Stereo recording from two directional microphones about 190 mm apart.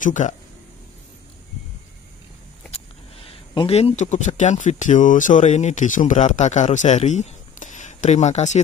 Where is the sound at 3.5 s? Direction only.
30° left (ahead or behind).